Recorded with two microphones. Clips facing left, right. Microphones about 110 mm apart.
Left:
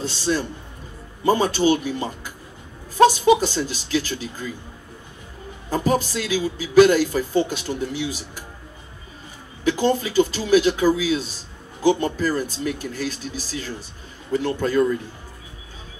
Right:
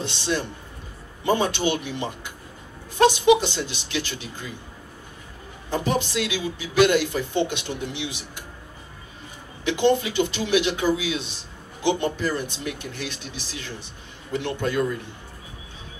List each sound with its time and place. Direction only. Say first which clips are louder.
0.0 s speech: left 3 dB; 40° left (ahead or behind)
5.7 s speech: left 3 dB; 40° left (ahead or behind)
9.7 s speech: even; 40° left (ahead or behind)